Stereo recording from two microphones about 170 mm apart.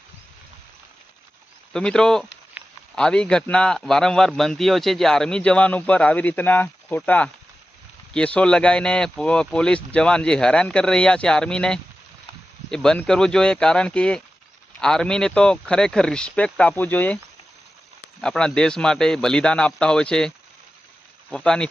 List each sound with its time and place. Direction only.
1.7 s a man's voice: 5° left (ahead or behind)
2.6 s a sound: 10° right (ahead or behind)
2.9 s a man's voice: 5° left (ahead or behind)
18.2 s a man's voice: 5° left (ahead or behind)